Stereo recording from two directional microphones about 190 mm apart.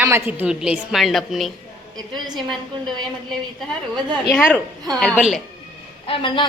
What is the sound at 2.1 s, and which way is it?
Speech, 20° right (ahead or behind).